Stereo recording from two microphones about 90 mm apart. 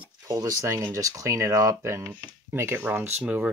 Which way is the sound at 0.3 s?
40° right (ahead or behind).